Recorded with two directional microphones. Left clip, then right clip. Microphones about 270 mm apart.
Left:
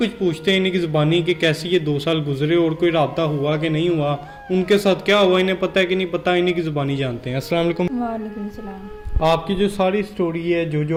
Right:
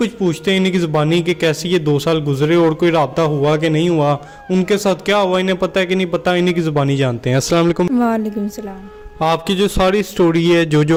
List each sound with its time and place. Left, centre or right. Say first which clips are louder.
0.0 s a man's voice: right 2 dB; right
9.2 s a man's voice: right 2 dB; right